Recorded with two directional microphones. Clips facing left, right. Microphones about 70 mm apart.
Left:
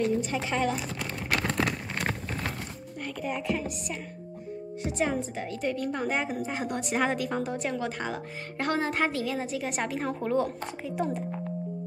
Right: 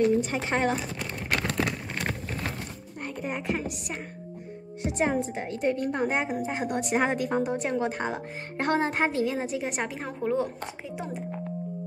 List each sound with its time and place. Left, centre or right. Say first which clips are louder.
0.2 s speech: right 2 dB; right
3.2 s a woman's voice: even; right
9.9 s speech: left 2 dB; centre